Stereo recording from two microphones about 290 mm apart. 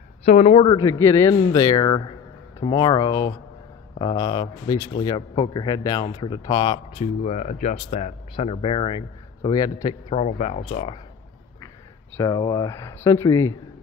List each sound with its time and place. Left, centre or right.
0.2 s speech: left
10.0 s speech: left
12.2 s speech: centre